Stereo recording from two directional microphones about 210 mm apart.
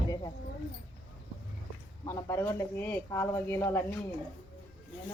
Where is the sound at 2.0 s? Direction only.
15° left (ahead or behind).